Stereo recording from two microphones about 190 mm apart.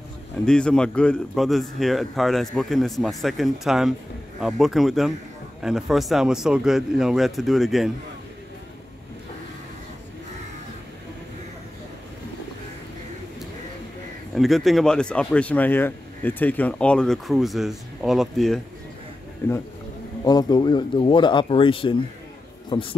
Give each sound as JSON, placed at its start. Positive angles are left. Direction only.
{"t": 0.5, "sound": "speech", "side_deg": 5}
{"t": 14.3, "sound": "speech", "side_deg": 0}
{"t": 19.4, "sound": "speech", "side_deg": 15}